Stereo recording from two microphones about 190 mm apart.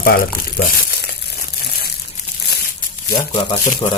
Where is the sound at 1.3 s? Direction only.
55° left (ahead or behind).